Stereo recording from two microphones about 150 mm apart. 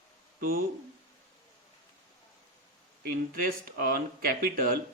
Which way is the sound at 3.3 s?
70° right (ahead or behind).